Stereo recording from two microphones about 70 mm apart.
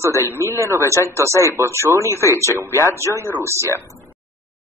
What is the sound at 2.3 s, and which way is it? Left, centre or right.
Speech, right.